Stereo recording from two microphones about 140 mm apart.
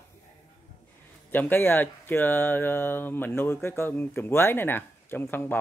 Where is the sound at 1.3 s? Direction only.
15° left (ahead or behind).